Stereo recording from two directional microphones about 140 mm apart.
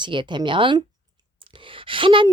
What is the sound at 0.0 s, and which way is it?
Speech, 35° right (ahead or behind).